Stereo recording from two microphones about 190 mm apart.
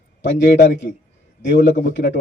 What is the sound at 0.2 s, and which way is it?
A man's voice, 70° left (ahead or behind).